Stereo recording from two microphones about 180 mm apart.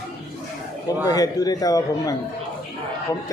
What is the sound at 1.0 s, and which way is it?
A man's voice, 20° left (ahead or behind).